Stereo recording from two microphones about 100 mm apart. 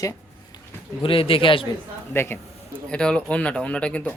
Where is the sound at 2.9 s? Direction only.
10° left (ahead or behind).